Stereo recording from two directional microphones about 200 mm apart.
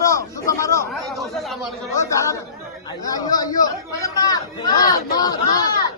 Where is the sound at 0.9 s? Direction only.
Centre (ahead or behind).